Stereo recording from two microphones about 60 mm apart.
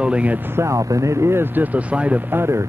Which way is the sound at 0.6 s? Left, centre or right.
Right.